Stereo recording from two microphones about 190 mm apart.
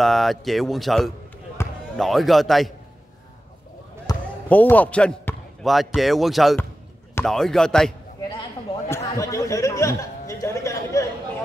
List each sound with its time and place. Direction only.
0.0 s speech: centre (ahead or behind)
1.6 s basketball bounce: 15° left (ahead or behind)
2.0 s speech: centre (ahead or behind)
4.1 s basketball bounce: 20° left (ahead or behind)
4.5 s speech: 10° left (ahead or behind)
8.8 s speech: 15° left (ahead or behind)